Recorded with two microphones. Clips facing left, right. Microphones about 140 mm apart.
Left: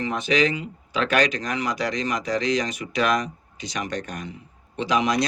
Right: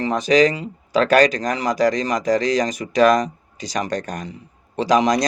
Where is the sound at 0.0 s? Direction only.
35° right (ahead or behind).